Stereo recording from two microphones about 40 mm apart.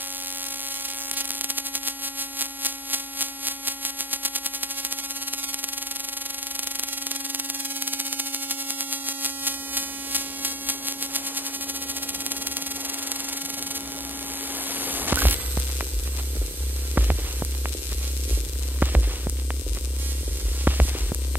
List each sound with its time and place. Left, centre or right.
1.0 s static: right
6.5 s mains hum: right
14.5 s a sound: right
16.9 s music: right
18.8 s music: right
20.6 s music: right